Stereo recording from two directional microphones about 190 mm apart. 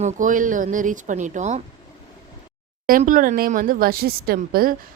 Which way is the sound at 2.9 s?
45° right (ahead or behind).